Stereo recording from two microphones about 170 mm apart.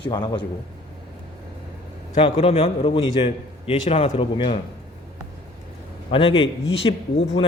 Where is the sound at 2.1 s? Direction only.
35° left (ahead or behind).